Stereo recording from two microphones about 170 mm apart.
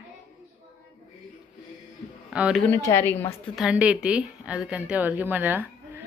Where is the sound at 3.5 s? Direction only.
5° right (ahead or behind).